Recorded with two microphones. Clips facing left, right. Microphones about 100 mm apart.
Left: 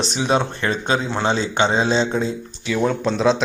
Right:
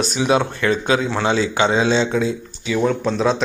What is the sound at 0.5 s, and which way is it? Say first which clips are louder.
Speech: right 3 dB; 35° left (ahead or behind).